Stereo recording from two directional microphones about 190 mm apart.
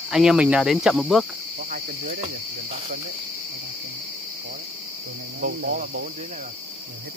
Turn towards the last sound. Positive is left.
turn(degrees=-45)  # may be behind; listen again after turning